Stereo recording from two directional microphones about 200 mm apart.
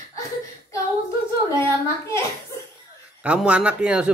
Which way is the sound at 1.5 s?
15° left (ahead or behind).